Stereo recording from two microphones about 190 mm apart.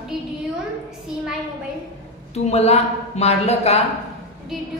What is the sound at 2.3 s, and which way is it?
A woman's voice, 35° left (ahead or behind).